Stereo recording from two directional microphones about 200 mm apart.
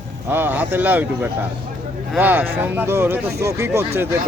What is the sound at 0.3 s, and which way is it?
Speech, 10° right (ahead or behind).